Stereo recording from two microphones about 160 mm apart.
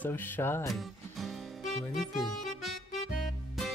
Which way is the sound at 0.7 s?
Centre (ahead or behind).